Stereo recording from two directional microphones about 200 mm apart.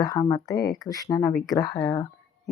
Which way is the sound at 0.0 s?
15° left (ahead or behind).